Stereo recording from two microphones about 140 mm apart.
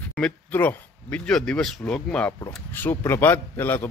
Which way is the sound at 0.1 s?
10° left (ahead or behind).